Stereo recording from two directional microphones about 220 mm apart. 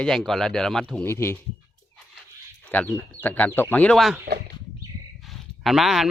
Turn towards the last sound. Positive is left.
turn(degrees=0)  # may be behind; listen again after turning